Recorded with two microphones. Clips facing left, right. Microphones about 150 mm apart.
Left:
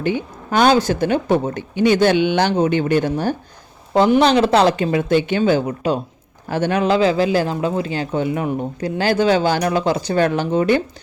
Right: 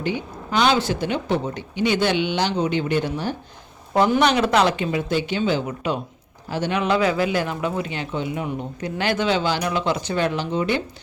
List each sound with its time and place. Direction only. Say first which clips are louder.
0.0 s speech: left 5 dB; 50° left (ahead or behind)
3.9 s speech: left 4 dB; 30° left (ahead or behind)
4.9 s speech: left 6 dB; 55° left (ahead or behind)
5.6 s a man's voice: left 5 dB; 35° left (ahead or behind)
6.5 s a man's voice: left 4 dB; 50° left (ahead or behind)
8.8 s speech: left 5 dB; 35° left (ahead or behind)